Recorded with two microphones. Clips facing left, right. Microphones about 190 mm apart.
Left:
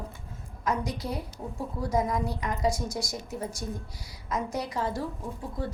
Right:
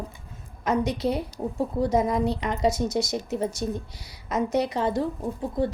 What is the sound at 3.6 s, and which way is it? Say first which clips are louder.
Speech: right 7 dB; 75° right (ahead or behind).